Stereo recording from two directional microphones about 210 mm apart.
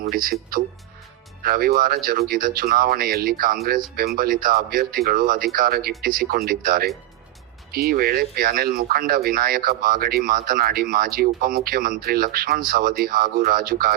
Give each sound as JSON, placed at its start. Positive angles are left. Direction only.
{"t": 0.0, "sound": "speech", "side_deg": -45}
{"t": 1.4, "sound": "speech", "side_deg": -45}